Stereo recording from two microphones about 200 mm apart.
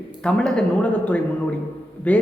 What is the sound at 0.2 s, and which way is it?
A man's voice, 5° left (ahead or behind).